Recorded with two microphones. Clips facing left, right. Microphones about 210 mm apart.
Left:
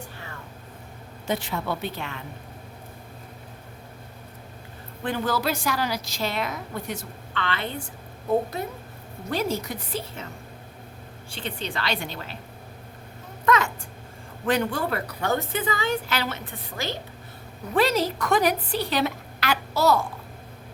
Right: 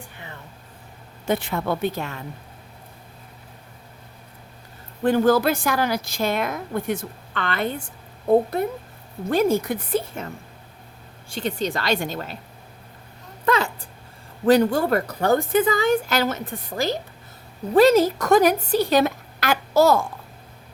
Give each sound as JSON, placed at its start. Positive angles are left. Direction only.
{"t": 1.3, "sound": "a woman's voice", "side_deg": -55}
{"t": 5.0, "sound": "a woman's voice", "side_deg": -45}
{"t": 11.3, "sound": "a woman's voice", "side_deg": -40}
{"t": 13.4, "sound": "a sound", "side_deg": -30}
{"t": 14.4, "sound": "a woman's voice", "side_deg": -40}